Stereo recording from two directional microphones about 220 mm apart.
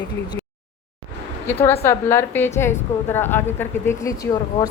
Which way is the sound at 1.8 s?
10° left (ahead or behind).